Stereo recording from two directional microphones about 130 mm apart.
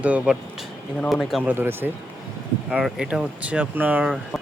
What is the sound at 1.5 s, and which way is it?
Speech, 15° right (ahead or behind).